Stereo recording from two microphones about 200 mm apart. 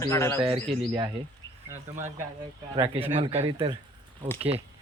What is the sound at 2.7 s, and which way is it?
Speech, 25° right (ahead or behind).